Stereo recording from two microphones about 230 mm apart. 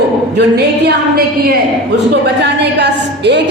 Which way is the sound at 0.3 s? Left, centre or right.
Right.